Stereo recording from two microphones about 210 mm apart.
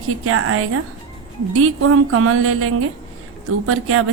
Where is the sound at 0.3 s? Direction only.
90° right.